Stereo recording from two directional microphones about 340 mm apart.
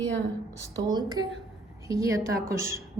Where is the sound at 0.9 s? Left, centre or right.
Centre.